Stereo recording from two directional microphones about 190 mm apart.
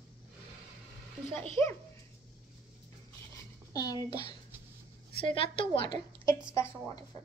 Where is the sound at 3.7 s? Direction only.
20° left (ahead or behind).